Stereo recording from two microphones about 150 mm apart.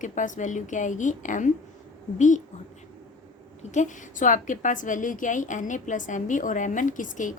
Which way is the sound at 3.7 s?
55° left (ahead or behind).